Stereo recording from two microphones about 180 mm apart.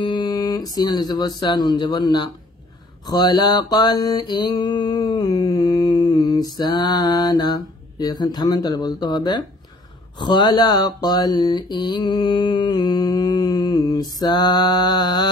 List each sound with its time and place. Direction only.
0.0 s speech: 25° left (ahead or behind)
3.1 s mantra: 25° left (ahead or behind)